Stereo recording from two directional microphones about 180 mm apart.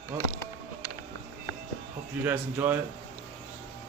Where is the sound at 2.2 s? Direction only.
10° right (ahead or behind).